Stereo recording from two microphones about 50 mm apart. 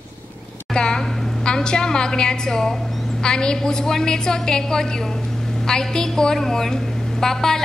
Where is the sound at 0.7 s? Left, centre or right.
Centre.